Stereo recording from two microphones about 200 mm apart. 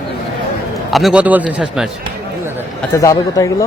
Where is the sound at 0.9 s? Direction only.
Centre (ahead or behind).